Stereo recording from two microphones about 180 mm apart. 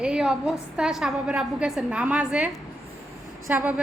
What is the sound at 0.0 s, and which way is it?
A woman's voice, 5° right (ahead or behind).